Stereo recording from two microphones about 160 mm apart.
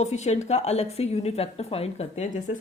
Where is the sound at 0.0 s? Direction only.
45° left (ahead or behind).